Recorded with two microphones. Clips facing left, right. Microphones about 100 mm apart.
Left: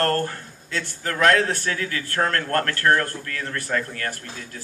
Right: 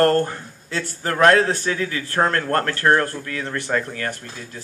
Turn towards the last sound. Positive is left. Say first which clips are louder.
# right 3 dB
turn(degrees=-20)  # may be behind; listen again after turning